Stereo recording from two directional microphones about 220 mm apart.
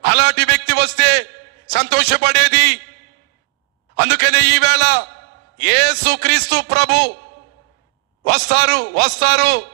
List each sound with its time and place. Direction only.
0.0 s a sound: 50° right (ahead or behind)
3.9 s a man's voice: 50° right (ahead or behind)
8.2 s a man's voice: 50° right (ahead or behind)